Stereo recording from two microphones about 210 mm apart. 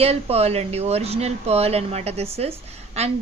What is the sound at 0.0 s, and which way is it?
A woman's voice, 30° right (ahead or behind).